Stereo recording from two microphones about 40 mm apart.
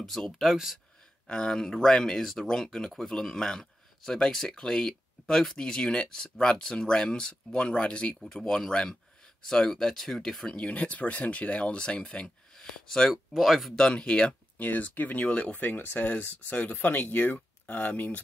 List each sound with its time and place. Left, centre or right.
0.0 s speech: centre
1.2 s speech: left
1.6 s speech: centre
5.7 s speech: left
8.3 s speech: centre
10.5 s speech: left
12.5 s speech: centre
13.1 s speech: centre
13.7 s speech: left
14.6 s speech: left
15.2 s speech: left
15.5 s speech: left